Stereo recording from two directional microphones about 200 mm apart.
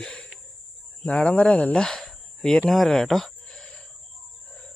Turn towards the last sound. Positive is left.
turn(degrees=5)  # may be behind; listen again after turning